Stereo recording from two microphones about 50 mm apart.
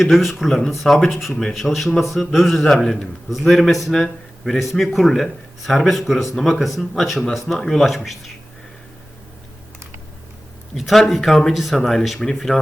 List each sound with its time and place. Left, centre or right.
0.0 s a man's voice: centre
10.8 s a man's voice: centre
11.8 s a man's voice: centre